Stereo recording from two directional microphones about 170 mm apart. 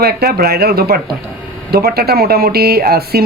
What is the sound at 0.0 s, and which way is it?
Speech, 65° right (ahead or behind).